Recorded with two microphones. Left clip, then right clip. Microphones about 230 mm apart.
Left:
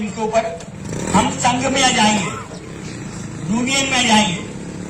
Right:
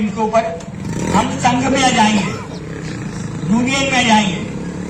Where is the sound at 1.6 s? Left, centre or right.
Left.